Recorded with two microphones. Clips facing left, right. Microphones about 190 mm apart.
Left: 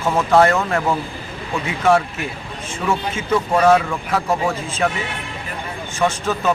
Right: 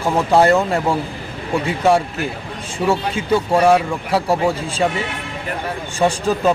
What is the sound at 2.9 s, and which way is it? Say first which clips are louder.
Speech: right 3 dB; 35° right (ahead or behind).